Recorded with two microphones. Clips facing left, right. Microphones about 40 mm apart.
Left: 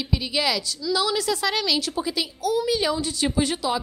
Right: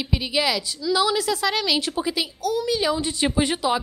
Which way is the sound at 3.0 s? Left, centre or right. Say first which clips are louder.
Right 1 dB; right.